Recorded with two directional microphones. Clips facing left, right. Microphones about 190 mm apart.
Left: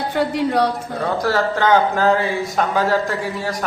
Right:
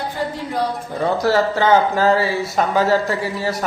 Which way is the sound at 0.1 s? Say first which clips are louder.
Left 6 dB; 70° left (ahead or behind).